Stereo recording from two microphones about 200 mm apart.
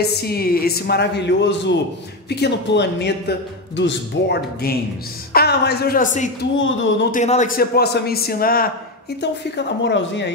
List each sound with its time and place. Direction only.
0.0 s a man's voice: 50° left (ahead or behind)
6.6 s speech: 70° left (ahead or behind)
7.1 s a man's voice: 35° left (ahead or behind)
9.2 s a man's voice: 60° left (ahead or behind)